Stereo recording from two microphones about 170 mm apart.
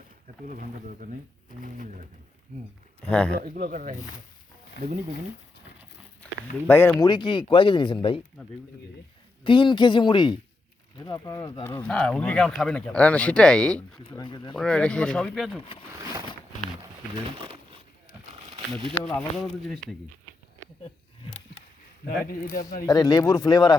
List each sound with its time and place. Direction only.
0.4 s speech: 50° right (ahead or behind)
3.0 s speech: 5° left (ahead or behind)
3.4 s speech: 60° right (ahead or behind)
6.7 s speech: 15° left (ahead or behind)
6.9 s speech: 25° left (ahead or behind)
9.4 s speech: 30° left (ahead or behind)
11.6 s speech: 10° left (ahead or behind)
14.1 s speech: 25° left (ahead or behind)
14.5 s speech: 5° left (ahead or behind)
17.3 s speech: 35° right (ahead or behind)
18.9 s speech: 5° left (ahead or behind)
22.0 s speech: 60° left (ahead or behind)
22.9 s speech: 20° left (ahead or behind)